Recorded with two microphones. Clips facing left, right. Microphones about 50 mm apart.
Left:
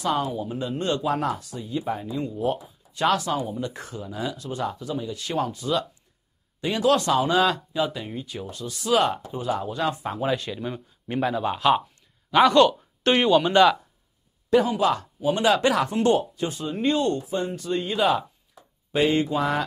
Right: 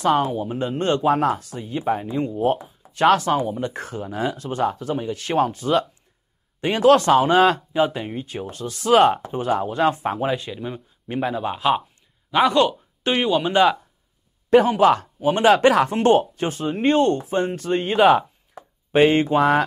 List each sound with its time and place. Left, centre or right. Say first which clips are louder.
0.0 s speech: right 6 dB; right
10.5 s speech: right 1 dB; centre
13.5 s speech: right 2 dB; centre
14.5 s speech: right 6 dB; right